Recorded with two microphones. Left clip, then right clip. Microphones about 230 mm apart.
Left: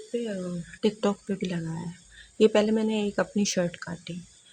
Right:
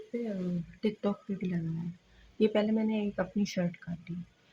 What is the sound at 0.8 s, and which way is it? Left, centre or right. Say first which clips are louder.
Speech: left 7 dB; left.